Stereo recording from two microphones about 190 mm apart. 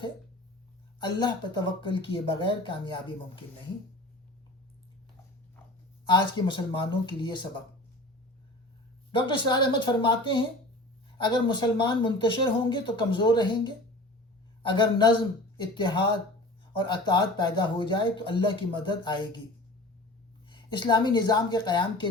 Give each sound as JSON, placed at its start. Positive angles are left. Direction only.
{"t": 0.9, "sound": "speech", "side_deg": 25}
{"t": 6.1, "sound": "speech", "side_deg": 25}
{"t": 9.1, "sound": "speech", "side_deg": 25}
{"t": 20.5, "sound": "speech", "side_deg": 25}